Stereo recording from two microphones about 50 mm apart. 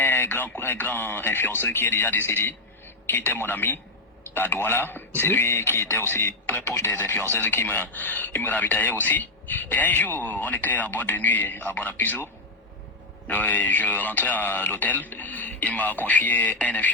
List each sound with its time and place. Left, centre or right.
0.0 s a sound: left
0.6 s a man's voice: left
13.3 s speech: left